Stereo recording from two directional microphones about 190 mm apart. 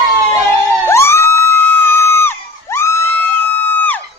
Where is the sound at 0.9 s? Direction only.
15° left (ahead or behind).